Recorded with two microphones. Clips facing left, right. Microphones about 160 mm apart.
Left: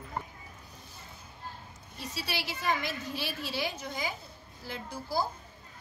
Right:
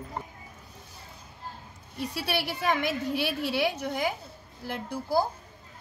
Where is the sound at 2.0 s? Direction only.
60° right (ahead or behind).